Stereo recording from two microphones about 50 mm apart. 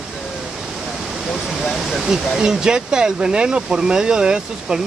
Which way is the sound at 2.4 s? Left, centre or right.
Centre.